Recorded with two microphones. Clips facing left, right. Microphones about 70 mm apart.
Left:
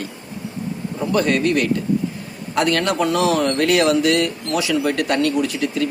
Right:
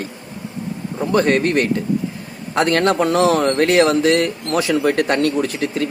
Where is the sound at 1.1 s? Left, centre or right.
Right.